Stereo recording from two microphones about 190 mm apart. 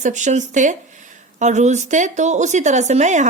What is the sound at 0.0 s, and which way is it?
Speech, 40° right (ahead or behind).